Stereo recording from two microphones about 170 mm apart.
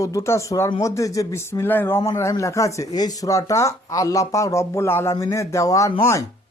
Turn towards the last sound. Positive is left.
turn(degrees=20)  # may be behind; listen again after turning